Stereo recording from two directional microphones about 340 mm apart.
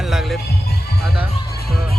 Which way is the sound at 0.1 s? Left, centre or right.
Centre.